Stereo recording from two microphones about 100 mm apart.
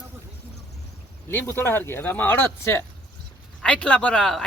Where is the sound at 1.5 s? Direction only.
25° left (ahead or behind).